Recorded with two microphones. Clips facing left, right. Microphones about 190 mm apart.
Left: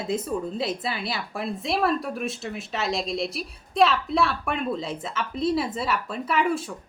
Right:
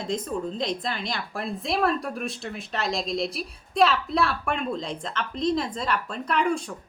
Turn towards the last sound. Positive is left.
turn(degrees=5)  # may be behind; listen again after turning